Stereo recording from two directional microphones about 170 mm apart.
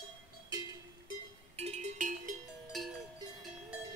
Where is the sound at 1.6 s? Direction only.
40° right (ahead or behind).